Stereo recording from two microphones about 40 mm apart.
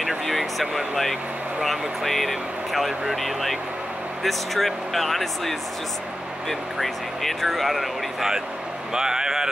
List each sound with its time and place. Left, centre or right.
0.3 s speech: centre
6.8 s speech: centre
8.9 s speech: centre